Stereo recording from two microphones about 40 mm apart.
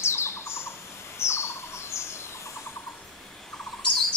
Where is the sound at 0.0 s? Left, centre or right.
Left.